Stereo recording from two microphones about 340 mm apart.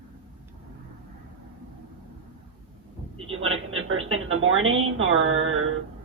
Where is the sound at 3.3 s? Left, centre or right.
Right.